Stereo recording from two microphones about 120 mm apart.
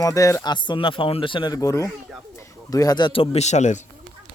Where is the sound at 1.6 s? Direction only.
25° left (ahead or behind); by 3.8 s 75° left (ahead or behind).